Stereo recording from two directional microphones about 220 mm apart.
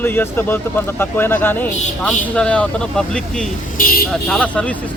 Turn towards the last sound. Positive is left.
turn(degrees=5)  # may be behind; listen again after turning